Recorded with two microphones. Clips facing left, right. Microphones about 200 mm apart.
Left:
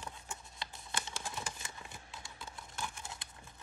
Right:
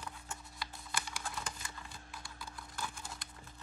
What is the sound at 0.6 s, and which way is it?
Typing, 25° left (ahead or behind).